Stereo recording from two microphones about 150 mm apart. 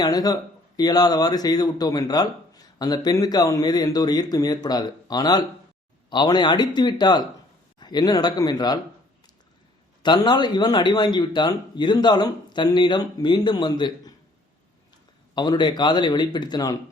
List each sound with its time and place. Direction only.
0.0 s a man's voice: 25° left (ahead or behind)
10.0 s a man's voice: 30° left (ahead or behind)
15.4 s a man's voice: 30° left (ahead or behind)